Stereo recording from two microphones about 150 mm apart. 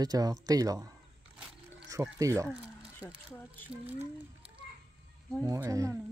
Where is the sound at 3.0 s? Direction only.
10° left (ahead or behind).